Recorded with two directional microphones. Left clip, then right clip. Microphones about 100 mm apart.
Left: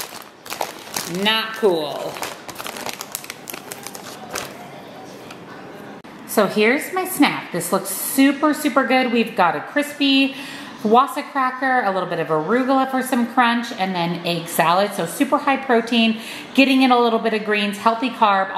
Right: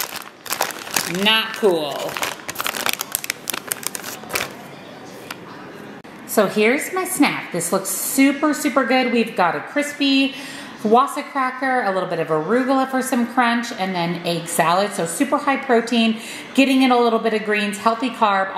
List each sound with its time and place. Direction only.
0.6 s crumpling: 25° right (ahead or behind)
1.2 s speech: 5° right (ahead or behind)
2.1 s crumpling: 30° right (ahead or behind)
6.3 s a woman's voice: centre (ahead or behind)